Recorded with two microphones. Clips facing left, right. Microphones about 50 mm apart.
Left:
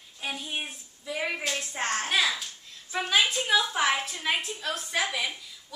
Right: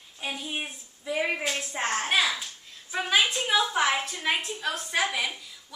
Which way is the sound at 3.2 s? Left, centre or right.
Centre.